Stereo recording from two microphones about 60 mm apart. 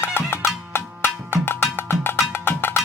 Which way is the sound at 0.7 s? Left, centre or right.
Left.